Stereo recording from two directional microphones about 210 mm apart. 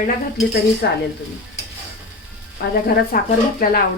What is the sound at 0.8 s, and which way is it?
Speech, 50° left (ahead or behind).